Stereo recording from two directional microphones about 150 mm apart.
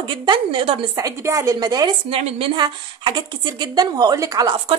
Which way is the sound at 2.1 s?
40° right (ahead or behind).